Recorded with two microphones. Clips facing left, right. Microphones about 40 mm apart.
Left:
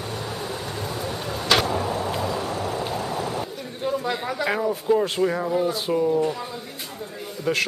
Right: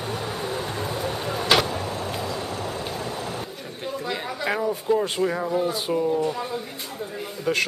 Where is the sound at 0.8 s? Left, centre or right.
Centre.